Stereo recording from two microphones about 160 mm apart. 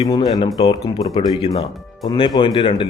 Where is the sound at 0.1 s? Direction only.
25° left (ahead or behind).